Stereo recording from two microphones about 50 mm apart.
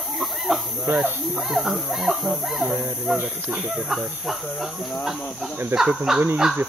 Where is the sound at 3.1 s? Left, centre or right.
Right.